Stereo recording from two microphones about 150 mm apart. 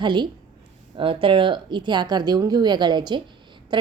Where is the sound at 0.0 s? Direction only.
30° right (ahead or behind).